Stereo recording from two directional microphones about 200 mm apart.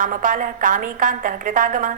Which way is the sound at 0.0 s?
40° right (ahead or behind).